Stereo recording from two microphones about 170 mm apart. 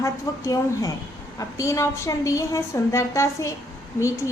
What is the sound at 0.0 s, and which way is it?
A woman's voice, 20° left (ahead or behind).